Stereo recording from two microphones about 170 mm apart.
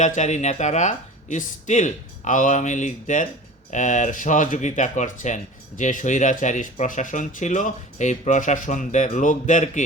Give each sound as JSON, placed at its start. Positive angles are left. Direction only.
{"t": 0.0, "sound": "speech", "side_deg": 45}